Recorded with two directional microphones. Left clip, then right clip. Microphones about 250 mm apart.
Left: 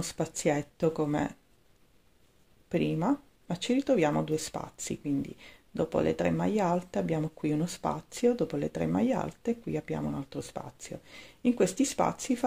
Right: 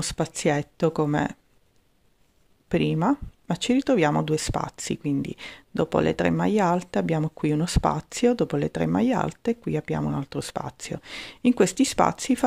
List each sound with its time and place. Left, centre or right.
0.0 s speech: right
2.7 s speech: right